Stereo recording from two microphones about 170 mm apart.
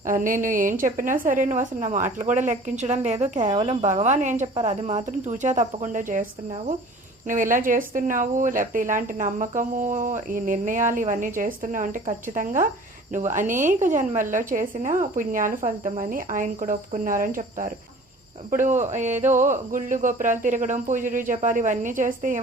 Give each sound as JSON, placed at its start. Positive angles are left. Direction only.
{"t": 0.0, "sound": "a woman's voice", "side_deg": -50}
{"t": 7.3, "sound": "a woman's voice", "side_deg": -50}